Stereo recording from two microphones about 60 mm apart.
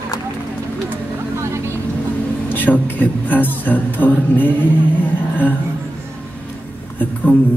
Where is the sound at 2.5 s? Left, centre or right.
Left.